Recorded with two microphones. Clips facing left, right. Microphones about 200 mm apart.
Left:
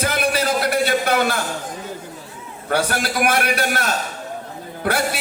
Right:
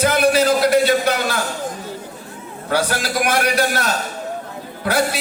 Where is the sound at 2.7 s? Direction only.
55° left (ahead or behind).